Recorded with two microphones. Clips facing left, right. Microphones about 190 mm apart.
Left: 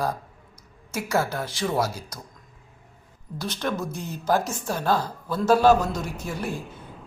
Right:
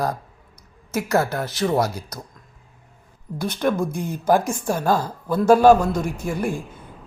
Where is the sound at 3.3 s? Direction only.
55° right (ahead or behind).